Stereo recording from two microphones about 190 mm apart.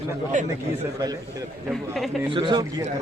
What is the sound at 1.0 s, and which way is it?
Speech, 20° right (ahead or behind).